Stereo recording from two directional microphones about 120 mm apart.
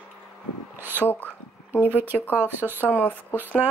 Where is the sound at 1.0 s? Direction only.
15° left (ahead or behind).